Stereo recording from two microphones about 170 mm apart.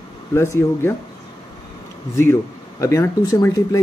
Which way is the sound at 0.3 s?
15° left (ahead or behind).